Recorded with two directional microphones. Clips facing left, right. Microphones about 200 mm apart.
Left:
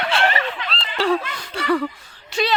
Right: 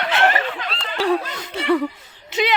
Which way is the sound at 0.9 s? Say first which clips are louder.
Even; 15° right (ahead or behind).